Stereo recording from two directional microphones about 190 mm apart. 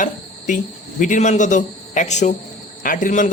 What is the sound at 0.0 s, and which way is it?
Speech, 45° left (ahead or behind).